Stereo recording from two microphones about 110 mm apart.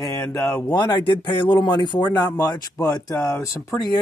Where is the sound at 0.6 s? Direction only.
40° left (ahead or behind).